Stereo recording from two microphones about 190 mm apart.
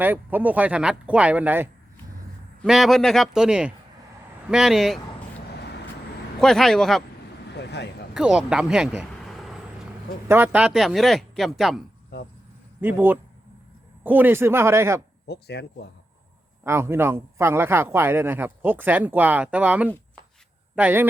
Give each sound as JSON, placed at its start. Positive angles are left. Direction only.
{"t": 0.0, "sound": "a man's voice", "side_deg": -10}
{"t": 5.5, "sound": "vehicle", "side_deg": 60}
{"t": 6.4, "sound": "speech", "side_deg": 0}
{"t": 7.5, "sound": "a sound", "side_deg": 60}
{"t": 8.1, "sound": "speech", "side_deg": -5}
{"t": 10.2, "sound": "speech", "side_deg": -10}
{"t": 12.8, "sound": "a man's voice", "side_deg": -10}
{"t": 15.3, "sound": "speech", "side_deg": 60}
{"t": 16.6, "sound": "a man's voice", "side_deg": -15}